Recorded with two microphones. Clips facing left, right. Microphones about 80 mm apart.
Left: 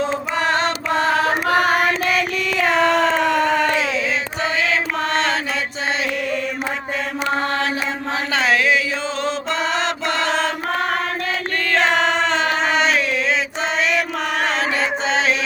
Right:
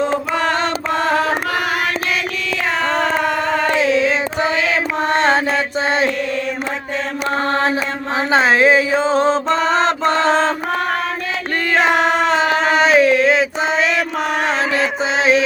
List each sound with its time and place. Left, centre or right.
1.5 s carnatic music: left
5.0 s mantra: right
8.3 s chant: right
11.7 s a sound: centre
15.2 s music: centre